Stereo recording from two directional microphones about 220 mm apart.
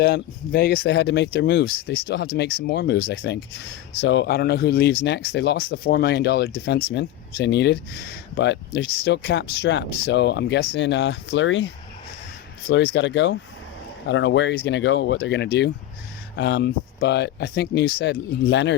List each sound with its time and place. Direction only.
0.0 s speech: 45° left (ahead or behind)